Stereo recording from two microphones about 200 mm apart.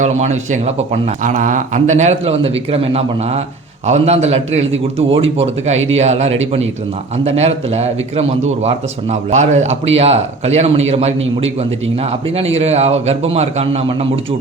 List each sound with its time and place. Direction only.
0.0 s a man's voice: 35° right (ahead or behind)
6.0 s a man's voice: 35° right (ahead or behind)
12.5 s a man's voice: 30° right (ahead or behind)